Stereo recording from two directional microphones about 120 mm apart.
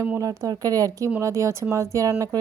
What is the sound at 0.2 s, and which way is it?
A woman's voice, 30° right (ahead or behind).